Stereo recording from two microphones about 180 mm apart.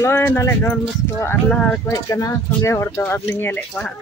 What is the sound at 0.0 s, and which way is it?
Speech, 10° left (ahead or behind).